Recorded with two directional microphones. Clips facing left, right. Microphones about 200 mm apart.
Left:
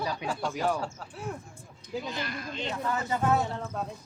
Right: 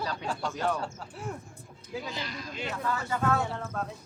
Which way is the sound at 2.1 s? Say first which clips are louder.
Left 2 dB; 55° left (ahead or behind).